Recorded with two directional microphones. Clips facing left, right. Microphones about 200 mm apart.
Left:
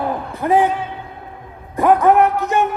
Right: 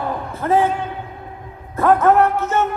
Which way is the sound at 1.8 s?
15° left (ahead or behind).